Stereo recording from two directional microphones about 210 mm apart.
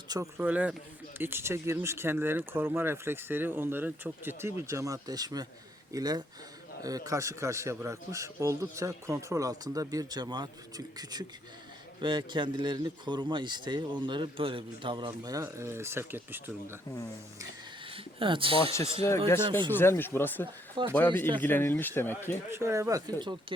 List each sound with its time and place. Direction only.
0.1 s a man's voice: 15° right (ahead or behind)
17.8 s a sound: 25° right (ahead or behind)
19.0 s speech: 15° left (ahead or behind)
19.5 s speech: 25° right (ahead or behind)
19.7 s speech: 10° left (ahead or behind)
22.5 s a man's voice: 15° right (ahead or behind)